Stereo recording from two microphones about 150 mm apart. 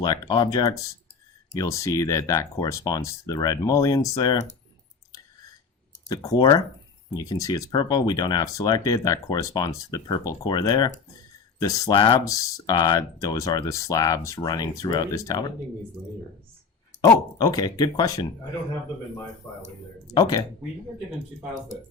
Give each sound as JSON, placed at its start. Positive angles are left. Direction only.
{"t": 0.0, "sound": "speech", "side_deg": 30}
{"t": 6.1, "sound": "speech", "side_deg": 25}
{"t": 17.3, "sound": "speech", "side_deg": 25}
{"t": 19.4, "sound": "speech", "side_deg": 20}